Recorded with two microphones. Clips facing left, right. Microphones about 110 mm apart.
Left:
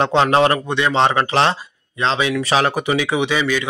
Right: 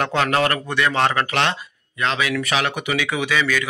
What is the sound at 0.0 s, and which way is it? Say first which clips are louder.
A man's voice: left 5 dB; 25° left (ahead or behind).